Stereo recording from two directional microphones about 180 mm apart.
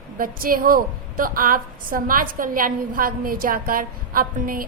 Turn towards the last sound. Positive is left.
turn(degrees=-50)  # may be behind; listen again after turning